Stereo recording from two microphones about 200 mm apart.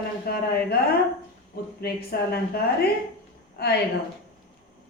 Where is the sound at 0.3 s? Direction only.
50° left (ahead or behind).